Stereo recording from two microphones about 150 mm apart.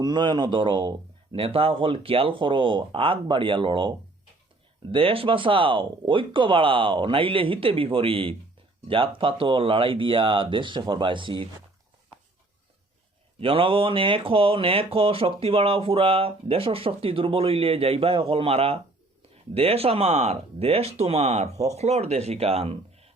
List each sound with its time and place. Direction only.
0.0 s speech: 30° right (ahead or behind)
13.4 s speech: 35° right (ahead or behind)